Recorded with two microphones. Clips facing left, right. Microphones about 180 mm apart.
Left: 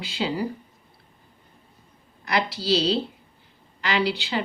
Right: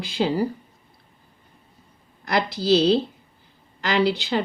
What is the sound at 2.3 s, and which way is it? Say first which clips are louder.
Speech: right 4 dB; 45° right (ahead or behind).